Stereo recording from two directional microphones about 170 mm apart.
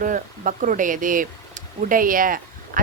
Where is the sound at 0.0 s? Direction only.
50° right (ahead or behind).